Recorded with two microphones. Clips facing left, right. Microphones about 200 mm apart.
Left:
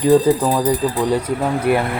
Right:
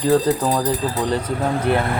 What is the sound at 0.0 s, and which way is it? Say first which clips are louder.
Speech: left 4 dB; 15° left (ahead or behind).